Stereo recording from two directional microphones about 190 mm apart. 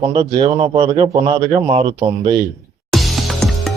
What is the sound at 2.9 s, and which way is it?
Music, centre (ahead or behind).